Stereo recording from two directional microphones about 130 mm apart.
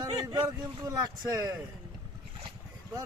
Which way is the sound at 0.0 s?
35° right (ahead or behind).